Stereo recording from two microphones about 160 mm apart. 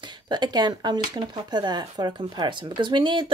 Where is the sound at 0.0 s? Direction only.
25° right (ahead or behind).